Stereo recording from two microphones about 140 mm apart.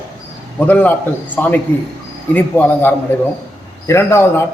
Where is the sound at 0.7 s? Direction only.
10° left (ahead or behind).